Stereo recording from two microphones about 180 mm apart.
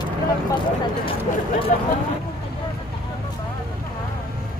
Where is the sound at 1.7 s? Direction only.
50° left (ahead or behind).